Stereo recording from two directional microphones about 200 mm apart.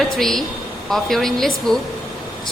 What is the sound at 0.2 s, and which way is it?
A woman's voice, centre (ahead or behind).